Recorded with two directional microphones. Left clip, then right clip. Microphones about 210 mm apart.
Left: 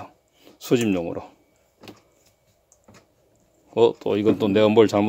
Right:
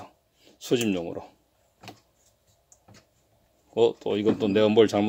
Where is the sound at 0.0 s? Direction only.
20° left (ahead or behind).